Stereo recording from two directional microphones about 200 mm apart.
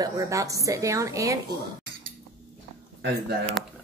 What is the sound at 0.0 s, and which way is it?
A woman's voice, 15° right (ahead or behind).